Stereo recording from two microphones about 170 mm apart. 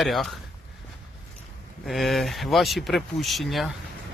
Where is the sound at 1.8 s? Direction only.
Centre (ahead or behind).